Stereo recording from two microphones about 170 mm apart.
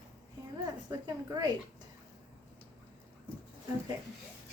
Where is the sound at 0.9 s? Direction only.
25° right (ahead or behind).